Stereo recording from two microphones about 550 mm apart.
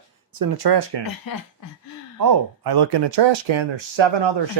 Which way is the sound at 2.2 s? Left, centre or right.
Right.